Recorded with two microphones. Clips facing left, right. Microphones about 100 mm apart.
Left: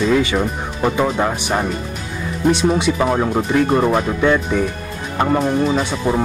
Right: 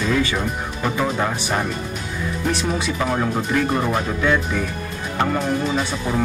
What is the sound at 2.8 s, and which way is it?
Speech, 25° left (ahead or behind).